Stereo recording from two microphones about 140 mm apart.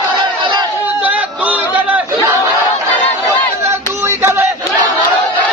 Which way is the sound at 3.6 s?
20° right (ahead or behind).